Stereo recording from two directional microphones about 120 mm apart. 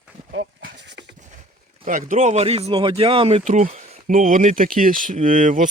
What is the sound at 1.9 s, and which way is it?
Speech, 90° right.